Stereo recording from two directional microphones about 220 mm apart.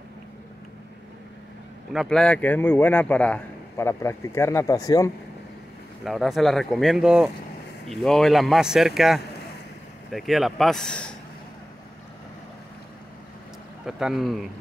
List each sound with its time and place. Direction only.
1.9 s speech: centre (ahead or behind)
6.0 s speech: centre (ahead or behind)
13.8 s speech: centre (ahead or behind)